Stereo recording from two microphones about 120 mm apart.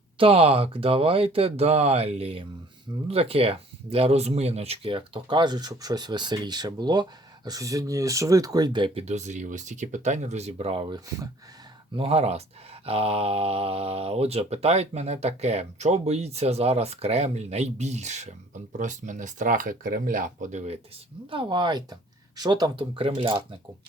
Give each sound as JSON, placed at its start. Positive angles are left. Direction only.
{"t": 0.2, "sound": "speech", "side_deg": -50}
{"t": 9.0, "sound": "speech", "side_deg": -70}
{"t": 11.9, "sound": "speech", "side_deg": -55}
{"t": 18.8, "sound": "speech", "side_deg": -90}
{"t": 21.2, "sound": "speech", "side_deg": -45}